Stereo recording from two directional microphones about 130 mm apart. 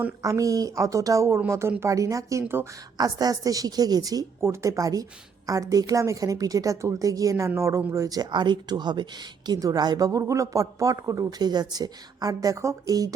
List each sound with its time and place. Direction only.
0.2 s speech: 25° right (ahead or behind)